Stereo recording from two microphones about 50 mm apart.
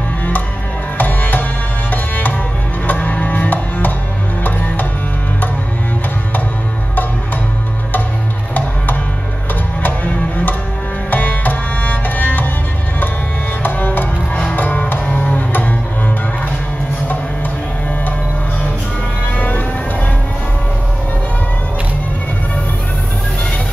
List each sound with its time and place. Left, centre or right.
0.9 s music: left
9.8 s music: left
13.6 s music: left
19.3 s a sound: left